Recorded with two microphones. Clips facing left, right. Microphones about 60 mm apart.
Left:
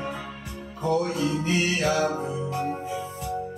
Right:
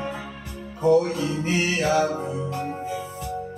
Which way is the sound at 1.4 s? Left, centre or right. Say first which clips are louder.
Right 4 dB; right.